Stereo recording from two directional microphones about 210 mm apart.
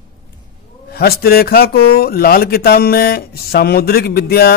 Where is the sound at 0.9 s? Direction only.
45° left (ahead or behind).